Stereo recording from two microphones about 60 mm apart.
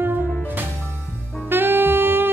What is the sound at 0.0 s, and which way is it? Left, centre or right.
Music, right.